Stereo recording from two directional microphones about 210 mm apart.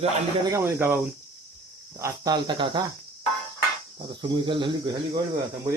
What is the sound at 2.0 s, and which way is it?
Speech, 15° right (ahead or behind).